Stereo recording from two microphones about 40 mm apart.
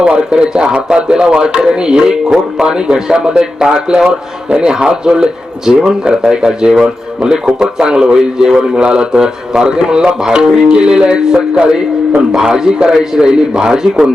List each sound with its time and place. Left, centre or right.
0.0 s a man's voice: right